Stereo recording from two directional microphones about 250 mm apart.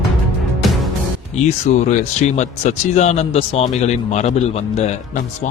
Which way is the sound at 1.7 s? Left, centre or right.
Left.